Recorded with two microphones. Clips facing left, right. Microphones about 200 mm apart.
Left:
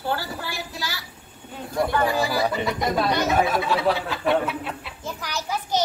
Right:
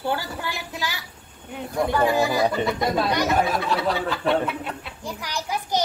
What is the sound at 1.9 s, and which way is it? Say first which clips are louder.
Speech: right 4 dB; 20° right (ahead or behind).